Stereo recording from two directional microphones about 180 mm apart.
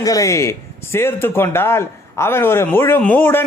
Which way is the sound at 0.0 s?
20° left (ahead or behind).